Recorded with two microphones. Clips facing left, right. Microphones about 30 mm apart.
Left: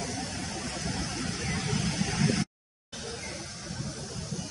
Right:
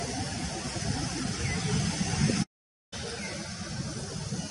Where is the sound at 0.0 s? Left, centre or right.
Centre.